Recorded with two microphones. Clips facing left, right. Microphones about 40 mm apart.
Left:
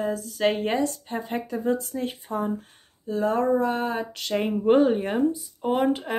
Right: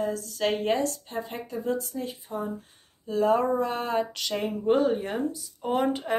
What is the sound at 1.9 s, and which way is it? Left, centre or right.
Speech, left.